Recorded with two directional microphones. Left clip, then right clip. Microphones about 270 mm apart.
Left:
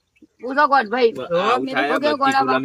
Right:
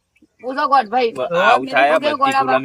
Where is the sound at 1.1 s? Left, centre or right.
Centre.